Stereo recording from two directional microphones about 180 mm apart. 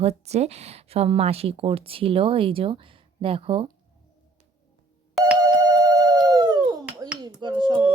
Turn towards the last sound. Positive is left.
turn(degrees=-25)  # may be behind; listen again after turning